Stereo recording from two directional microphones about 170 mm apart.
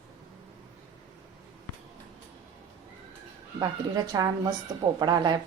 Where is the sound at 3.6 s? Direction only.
20° right (ahead or behind).